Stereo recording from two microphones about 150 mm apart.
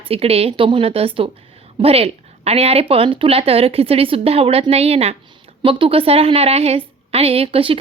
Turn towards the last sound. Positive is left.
turn(degrees=-40)  # may be behind; listen again after turning